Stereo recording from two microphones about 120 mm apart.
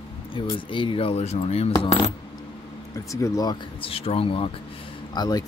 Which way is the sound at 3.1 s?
25° left (ahead or behind).